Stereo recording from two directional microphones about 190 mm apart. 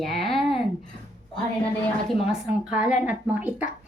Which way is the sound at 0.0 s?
Centre (ahead or behind).